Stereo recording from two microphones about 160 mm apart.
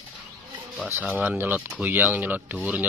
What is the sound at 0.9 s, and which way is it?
Speech, 10° right (ahead or behind).